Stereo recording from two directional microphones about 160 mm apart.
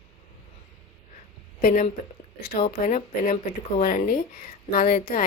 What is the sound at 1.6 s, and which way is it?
Speech, 60° left (ahead or behind).